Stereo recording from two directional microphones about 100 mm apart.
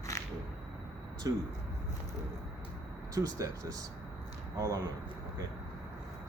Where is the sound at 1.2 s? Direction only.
35° right (ahead or behind).